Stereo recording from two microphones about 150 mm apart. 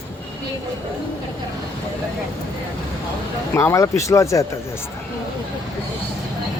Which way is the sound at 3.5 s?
20° left (ahead or behind).